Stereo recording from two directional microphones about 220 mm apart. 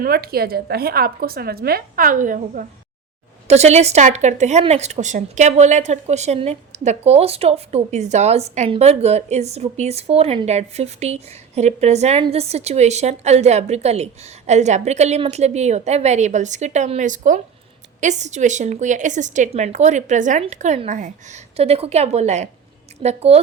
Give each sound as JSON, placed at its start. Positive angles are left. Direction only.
{"t": 0.0, "sound": "a woman's voice", "side_deg": -45}